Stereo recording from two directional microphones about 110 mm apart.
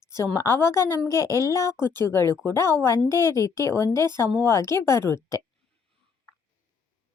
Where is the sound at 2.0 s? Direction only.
20° left (ahead or behind).